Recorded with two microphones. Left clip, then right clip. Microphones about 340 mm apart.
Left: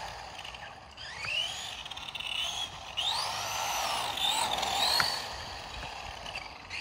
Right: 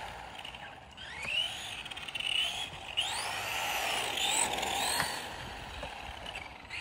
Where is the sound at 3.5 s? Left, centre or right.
Centre.